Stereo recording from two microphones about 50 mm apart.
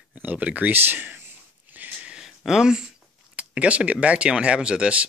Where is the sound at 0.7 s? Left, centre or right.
Right.